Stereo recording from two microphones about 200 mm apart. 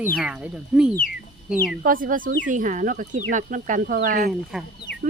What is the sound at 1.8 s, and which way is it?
Speech, 45° right (ahead or behind).